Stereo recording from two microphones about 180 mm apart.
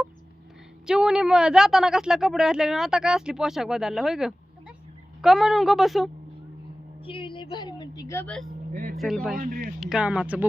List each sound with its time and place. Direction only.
0.9 s speech: 5° right (ahead or behind)
7.0 s a woman's voice: 30° left (ahead or behind)
8.7 s speech: 45° right (ahead or behind)
9.0 s speech: centre (ahead or behind)
9.4 s speech: 50° right (ahead or behind)
9.8 s speech: 5° right (ahead or behind)